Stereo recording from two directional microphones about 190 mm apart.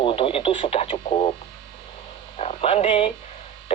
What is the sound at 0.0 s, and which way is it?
Radio, 30° left (ahead or behind).